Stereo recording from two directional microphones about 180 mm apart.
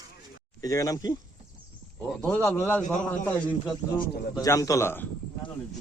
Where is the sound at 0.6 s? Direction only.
20° left (ahead or behind).